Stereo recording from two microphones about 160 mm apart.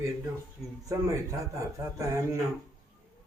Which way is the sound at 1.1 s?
20° right (ahead or behind).